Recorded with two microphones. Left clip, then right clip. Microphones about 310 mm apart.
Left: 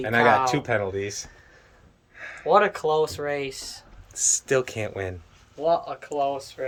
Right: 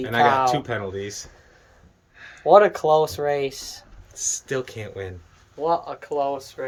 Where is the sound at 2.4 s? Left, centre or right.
Right.